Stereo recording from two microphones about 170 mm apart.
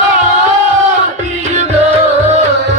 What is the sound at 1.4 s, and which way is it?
Music, 40° right (ahead or behind).